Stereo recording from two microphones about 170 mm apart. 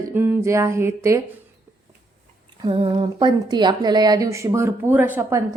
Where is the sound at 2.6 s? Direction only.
30° right (ahead or behind).